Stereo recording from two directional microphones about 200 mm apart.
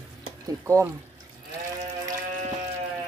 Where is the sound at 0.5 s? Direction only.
15° right (ahead or behind).